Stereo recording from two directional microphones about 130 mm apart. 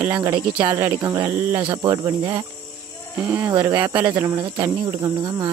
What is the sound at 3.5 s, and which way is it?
Speech, 30° right (ahead or behind).